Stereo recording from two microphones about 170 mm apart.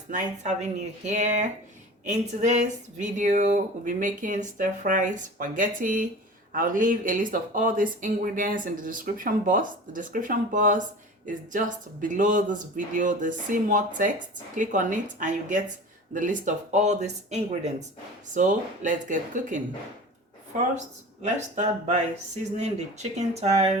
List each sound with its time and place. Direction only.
0.1 s speech: 40° right (ahead or behind)
20.7 s speech: 45° right (ahead or behind)
23.1 s speech: 40° right (ahead or behind)